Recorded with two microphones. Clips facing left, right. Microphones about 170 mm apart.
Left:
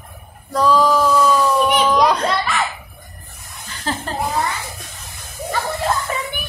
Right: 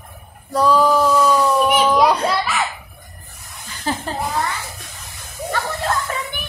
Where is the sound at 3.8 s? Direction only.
15° right (ahead or behind).